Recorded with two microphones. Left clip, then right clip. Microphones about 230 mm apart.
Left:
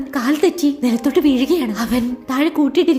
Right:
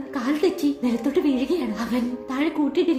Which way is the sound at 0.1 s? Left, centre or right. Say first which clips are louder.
Left 6 dB; left.